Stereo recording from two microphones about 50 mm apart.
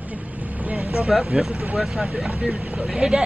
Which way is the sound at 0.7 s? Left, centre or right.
Centre.